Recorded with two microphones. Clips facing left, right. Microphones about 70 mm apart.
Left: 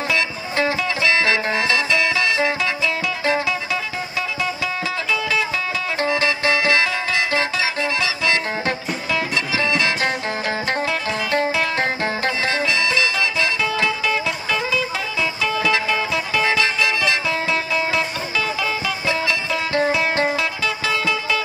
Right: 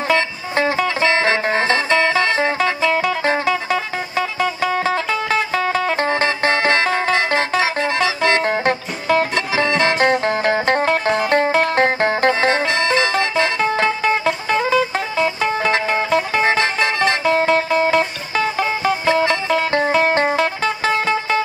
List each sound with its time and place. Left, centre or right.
0.1 s music: right